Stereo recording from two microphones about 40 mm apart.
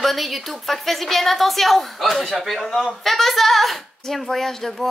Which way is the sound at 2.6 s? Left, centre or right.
Centre.